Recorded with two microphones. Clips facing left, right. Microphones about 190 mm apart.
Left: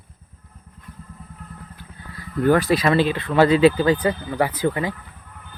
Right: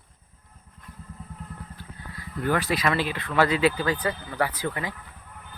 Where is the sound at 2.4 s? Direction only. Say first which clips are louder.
Left 7 dB; 40° left (ahead or behind).